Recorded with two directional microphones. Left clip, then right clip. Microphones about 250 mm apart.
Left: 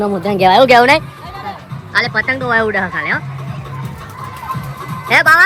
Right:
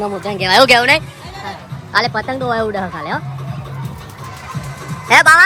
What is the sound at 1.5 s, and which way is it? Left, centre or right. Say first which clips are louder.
Music: left 1 dB; centre.